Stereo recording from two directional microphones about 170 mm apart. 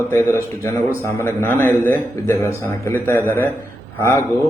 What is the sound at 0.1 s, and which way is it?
A man's voice, 15° left (ahead or behind).